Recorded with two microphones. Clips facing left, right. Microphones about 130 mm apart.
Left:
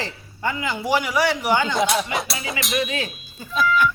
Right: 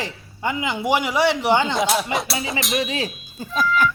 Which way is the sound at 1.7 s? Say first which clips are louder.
Even; centre (ahead or behind).